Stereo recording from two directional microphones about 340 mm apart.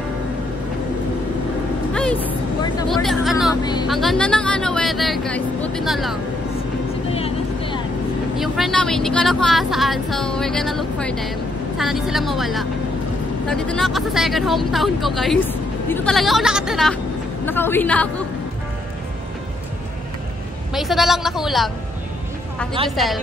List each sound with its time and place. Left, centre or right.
2.0 s vehicle: centre
3.9 s a woman's voice: centre
7.2 s vehicle: centre
8.4 s a woman's voice: centre
20.7 s a woman's voice: centre
22.8 s a woman's voice: centre